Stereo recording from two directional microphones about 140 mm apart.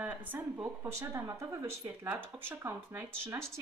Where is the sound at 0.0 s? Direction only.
15° right (ahead or behind).